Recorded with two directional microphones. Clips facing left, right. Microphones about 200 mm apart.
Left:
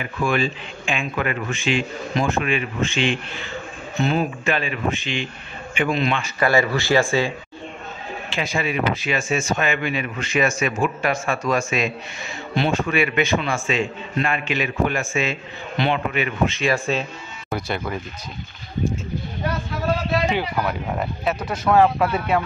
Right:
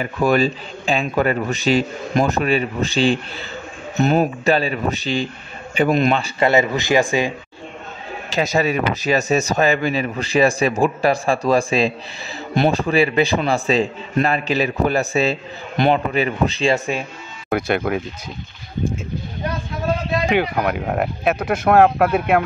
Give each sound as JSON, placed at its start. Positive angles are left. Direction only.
{"t": 0.0, "sound": "speech", "side_deg": -40}
{"t": 6.4, "sound": "speech", "side_deg": -20}
{"t": 8.3, "sound": "speech", "side_deg": -40}
{"t": 16.7, "sound": "speech", "side_deg": -15}
{"t": 17.5, "sound": "speech", "side_deg": -55}
{"t": 20.2, "sound": "speech", "side_deg": -60}